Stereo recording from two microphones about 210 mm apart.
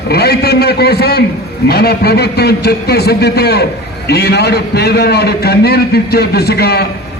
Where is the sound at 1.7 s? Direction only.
50° left (ahead or behind).